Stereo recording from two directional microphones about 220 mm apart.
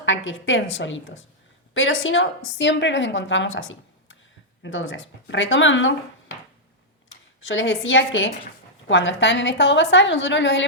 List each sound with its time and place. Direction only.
0.0 s a woman's voice: 60° left (ahead or behind)
7.4 s a woman's voice: 60° left (ahead or behind)